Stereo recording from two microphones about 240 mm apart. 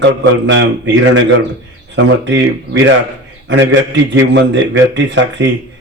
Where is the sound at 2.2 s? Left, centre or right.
Right.